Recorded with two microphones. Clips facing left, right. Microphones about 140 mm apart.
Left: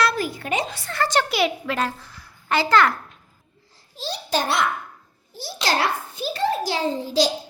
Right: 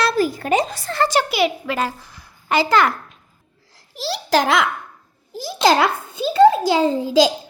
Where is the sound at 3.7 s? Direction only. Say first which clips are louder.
Right 5 dB; 90° right.